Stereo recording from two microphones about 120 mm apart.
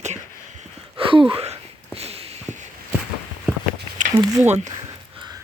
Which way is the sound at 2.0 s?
55° right (ahead or behind).